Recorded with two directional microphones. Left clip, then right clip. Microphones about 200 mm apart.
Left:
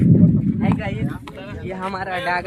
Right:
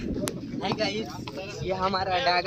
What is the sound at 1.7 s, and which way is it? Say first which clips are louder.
Speech: even; 30° right (ahead or behind).